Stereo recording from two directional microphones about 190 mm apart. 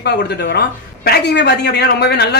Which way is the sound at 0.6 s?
60° left (ahead or behind).